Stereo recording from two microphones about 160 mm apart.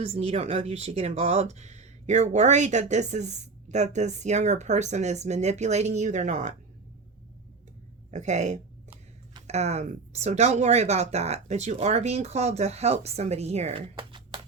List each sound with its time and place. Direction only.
0.1 s speech: 40° right (ahead or behind)
8.1 s speech: 45° right (ahead or behind); by 14.4 s 30° right (ahead or behind)